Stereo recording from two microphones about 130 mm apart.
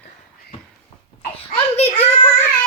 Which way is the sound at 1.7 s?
15° left (ahead or behind).